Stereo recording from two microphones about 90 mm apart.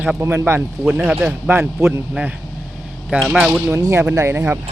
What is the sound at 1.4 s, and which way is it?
Speech, 25° right (ahead or behind).